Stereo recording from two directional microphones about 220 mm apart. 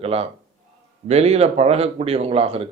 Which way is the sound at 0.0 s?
25° right (ahead or behind).